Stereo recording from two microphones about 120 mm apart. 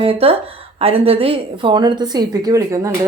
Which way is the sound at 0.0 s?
55° right (ahead or behind).